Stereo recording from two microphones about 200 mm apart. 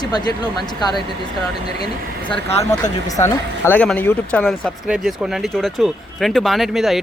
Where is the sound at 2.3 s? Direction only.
30° left (ahead or behind).